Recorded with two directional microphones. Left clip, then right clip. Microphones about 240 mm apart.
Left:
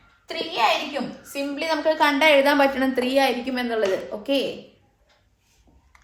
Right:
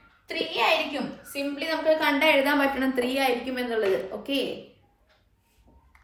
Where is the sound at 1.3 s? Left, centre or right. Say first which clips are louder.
Left 4 dB; left.